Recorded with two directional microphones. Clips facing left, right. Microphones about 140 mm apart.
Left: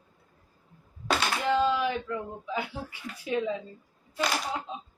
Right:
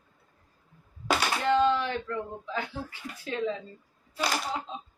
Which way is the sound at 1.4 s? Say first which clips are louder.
Right 1 dB; 10° left (ahead or behind).